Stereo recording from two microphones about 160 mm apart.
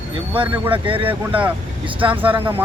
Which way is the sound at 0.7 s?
35° right (ahead or behind).